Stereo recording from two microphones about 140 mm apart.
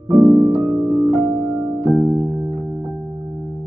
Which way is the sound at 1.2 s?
35° right (ahead or behind).